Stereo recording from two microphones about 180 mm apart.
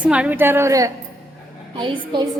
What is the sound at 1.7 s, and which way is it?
Speech, 30° right (ahead or behind).